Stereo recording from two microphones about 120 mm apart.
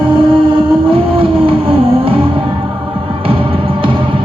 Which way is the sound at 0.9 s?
50° right (ahead or behind).